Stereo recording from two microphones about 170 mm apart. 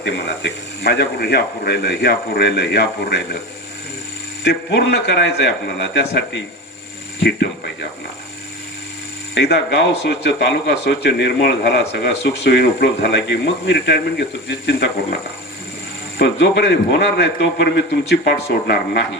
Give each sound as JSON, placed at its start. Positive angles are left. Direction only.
{"t": 0.0, "sound": "speech", "side_deg": 80}
{"t": 4.4, "sound": "a man's voice", "side_deg": 80}
{"t": 7.2, "sound": "a man's voice", "side_deg": 80}
{"t": 9.3, "sound": "a man's voice", "side_deg": 85}
{"t": 16.1, "sound": "a man's voice", "side_deg": 90}